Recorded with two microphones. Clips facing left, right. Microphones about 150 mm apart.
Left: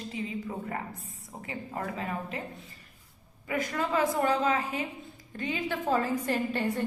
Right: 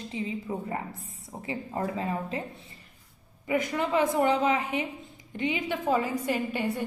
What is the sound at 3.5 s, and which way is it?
A woman's voice, 20° right (ahead or behind).